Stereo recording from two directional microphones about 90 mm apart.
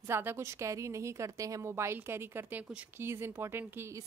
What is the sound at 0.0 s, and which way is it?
A woman's voice, 25° right (ahead or behind).